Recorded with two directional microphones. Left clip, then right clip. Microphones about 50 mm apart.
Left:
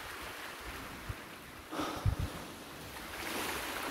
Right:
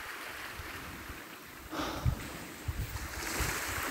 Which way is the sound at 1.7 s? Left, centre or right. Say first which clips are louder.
Right 1 dB; left.